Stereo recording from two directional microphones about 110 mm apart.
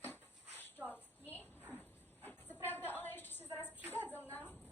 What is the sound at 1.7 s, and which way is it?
Dog, 15° left (ahead or behind).